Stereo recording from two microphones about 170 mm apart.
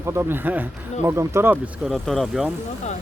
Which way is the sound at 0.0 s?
15° right (ahead or behind).